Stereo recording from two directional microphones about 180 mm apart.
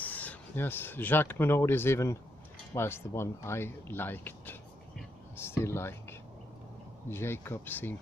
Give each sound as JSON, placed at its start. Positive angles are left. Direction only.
{"t": 0.0, "sound": "speech", "side_deg": 10}
{"t": 5.6, "sound": "speech", "side_deg": 15}